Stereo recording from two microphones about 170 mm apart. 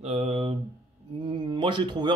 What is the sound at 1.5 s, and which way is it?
Speech, 30° right (ahead or behind).